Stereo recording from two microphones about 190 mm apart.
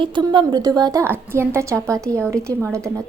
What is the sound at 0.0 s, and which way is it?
A woman's voice, 25° right (ahead or behind).